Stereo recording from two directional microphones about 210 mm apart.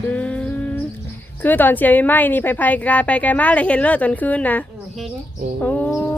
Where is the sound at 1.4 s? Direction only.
10° left (ahead or behind).